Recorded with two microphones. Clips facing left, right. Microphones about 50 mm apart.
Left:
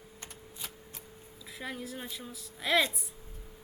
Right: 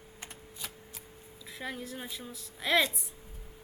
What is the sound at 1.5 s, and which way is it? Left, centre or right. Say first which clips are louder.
A woman's voice: even; centre.